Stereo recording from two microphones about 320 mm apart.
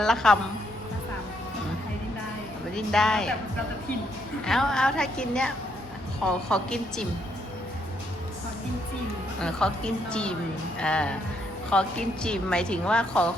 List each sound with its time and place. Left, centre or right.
0.0 s a woman's voice: centre
2.7 s a woman's voice: centre
4.4 s a woman's voice: centre
9.4 s a woman's voice: centre